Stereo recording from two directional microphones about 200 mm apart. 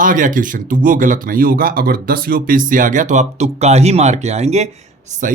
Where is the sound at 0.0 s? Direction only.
40° right (ahead or behind).